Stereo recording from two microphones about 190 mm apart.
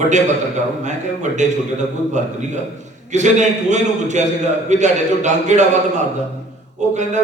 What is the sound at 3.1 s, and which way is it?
A man's voice, 40° right (ahead or behind).